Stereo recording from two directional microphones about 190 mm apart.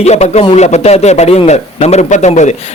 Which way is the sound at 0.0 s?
35° left (ahead or behind).